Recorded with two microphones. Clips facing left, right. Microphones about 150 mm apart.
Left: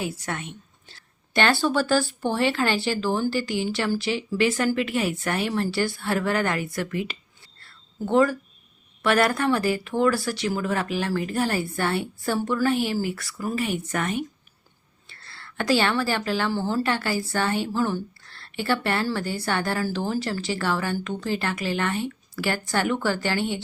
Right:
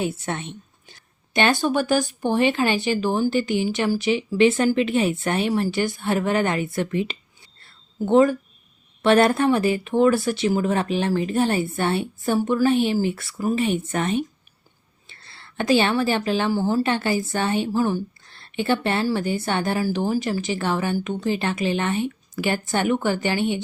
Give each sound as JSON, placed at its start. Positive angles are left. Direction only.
{"t": 0.0, "sound": "a woman's voice", "side_deg": -25}
{"t": 7.6, "sound": "a sound", "side_deg": -20}
{"t": 9.0, "sound": "a woman's voice", "side_deg": -25}